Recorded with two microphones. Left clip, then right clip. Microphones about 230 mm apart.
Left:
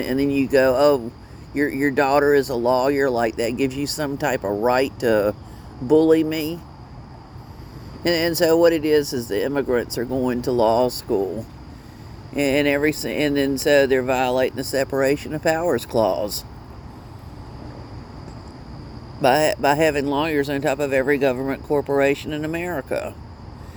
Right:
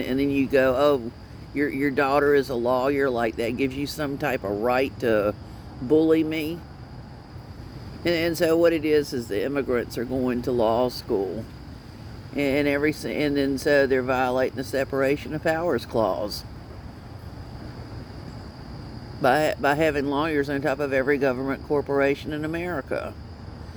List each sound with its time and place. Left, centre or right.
0.0 s speech: left
8.0 s speech: left
12.3 s speech: left
19.2 s speech: left